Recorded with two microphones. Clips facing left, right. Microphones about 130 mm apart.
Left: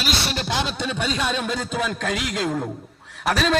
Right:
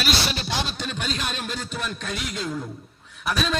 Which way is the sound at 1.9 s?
90° left.